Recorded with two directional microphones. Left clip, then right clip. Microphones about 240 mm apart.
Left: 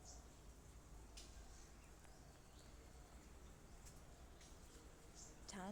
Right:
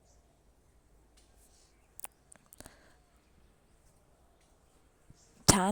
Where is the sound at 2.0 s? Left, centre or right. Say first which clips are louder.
Right 19 dB; right.